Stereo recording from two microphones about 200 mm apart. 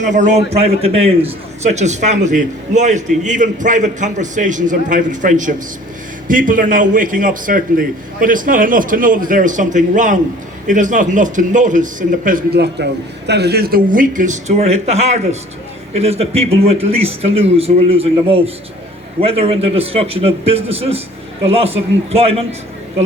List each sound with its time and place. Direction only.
0.0 s a man's voice: 40° right (ahead or behind)